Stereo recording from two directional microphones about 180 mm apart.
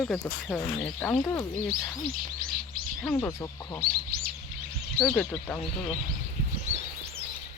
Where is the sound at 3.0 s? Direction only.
10° left (ahead or behind).